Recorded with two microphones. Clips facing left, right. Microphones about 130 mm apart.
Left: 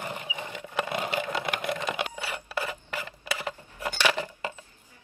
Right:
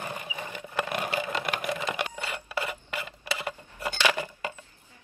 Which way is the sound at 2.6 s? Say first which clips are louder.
Even; 15° right (ahead or behind).